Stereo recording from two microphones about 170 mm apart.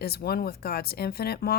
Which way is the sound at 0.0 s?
65° left (ahead or behind).